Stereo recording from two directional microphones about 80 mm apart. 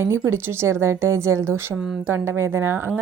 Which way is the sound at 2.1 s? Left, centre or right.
Right.